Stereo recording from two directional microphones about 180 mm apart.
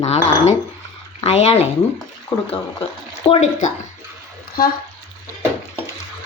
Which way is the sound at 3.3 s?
40° left (ahead or behind).